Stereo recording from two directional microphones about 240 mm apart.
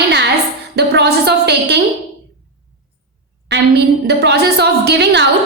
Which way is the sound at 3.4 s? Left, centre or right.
Right.